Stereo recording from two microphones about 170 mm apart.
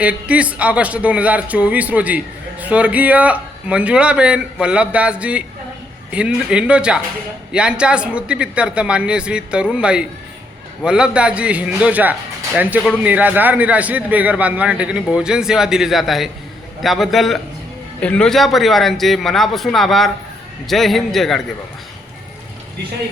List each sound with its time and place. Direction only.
0.0 s speech: 5° right (ahead or behind)